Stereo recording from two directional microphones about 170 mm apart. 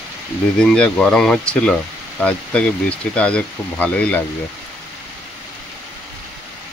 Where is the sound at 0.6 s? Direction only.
5° left (ahead or behind).